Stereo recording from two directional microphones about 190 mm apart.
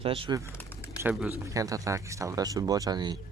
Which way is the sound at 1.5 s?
15° right (ahead or behind).